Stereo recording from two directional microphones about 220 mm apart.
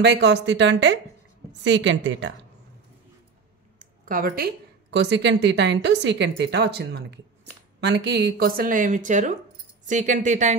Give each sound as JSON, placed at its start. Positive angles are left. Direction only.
{"t": 0.0, "sound": "a woman's voice", "side_deg": -50}
{"t": 3.8, "sound": "a sound", "side_deg": -40}
{"t": 4.9, "sound": "a woman's voice", "side_deg": -50}